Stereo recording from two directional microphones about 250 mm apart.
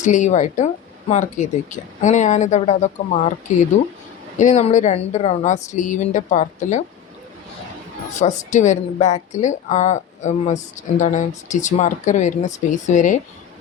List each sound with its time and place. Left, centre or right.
0.0 s a woman's voice: left
4.4 s a woman's voice: left
8.1 s a woman's voice: left